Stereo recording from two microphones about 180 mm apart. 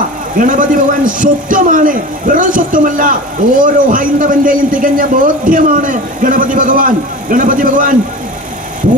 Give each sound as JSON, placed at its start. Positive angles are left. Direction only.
{"t": 0.4, "sound": "a man's voice", "side_deg": -50}